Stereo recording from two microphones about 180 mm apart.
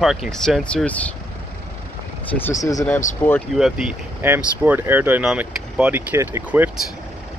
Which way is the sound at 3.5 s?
5° right (ahead or behind).